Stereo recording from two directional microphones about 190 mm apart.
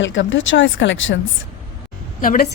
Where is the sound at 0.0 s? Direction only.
80° left.